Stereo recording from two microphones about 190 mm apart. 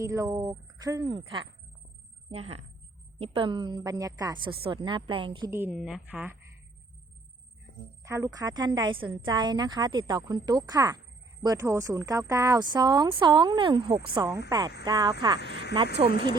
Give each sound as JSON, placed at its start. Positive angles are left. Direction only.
{"t": 0.0, "sound": "a woman's voice", "side_deg": -15}
{"t": 5.5, "sound": "a woman's voice", "side_deg": -10}
{"t": 8.0, "sound": "a woman's voice", "side_deg": -15}
{"t": 15.4, "sound": "speech", "side_deg": 65}